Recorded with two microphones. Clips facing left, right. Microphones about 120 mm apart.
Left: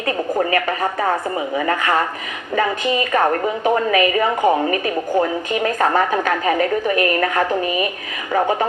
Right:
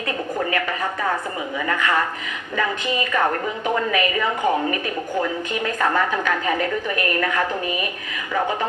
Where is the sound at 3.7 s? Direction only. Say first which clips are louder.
Left 4 dB; 45° left (ahead or behind).